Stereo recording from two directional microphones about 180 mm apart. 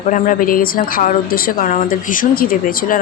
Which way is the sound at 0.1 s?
50° left (ahead or behind).